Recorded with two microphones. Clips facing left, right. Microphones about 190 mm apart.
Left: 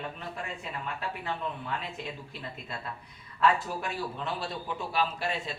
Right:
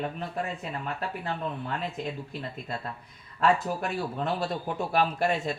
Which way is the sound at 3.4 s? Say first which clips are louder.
Right 2 dB; 45° right (ahead or behind).